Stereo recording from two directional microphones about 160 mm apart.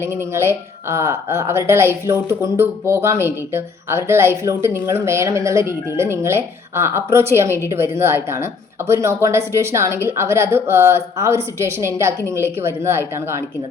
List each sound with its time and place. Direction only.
0.0 s a woman's voice: 15° right (ahead or behind)